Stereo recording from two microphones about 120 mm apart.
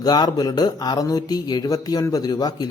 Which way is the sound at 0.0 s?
35° left (ahead or behind).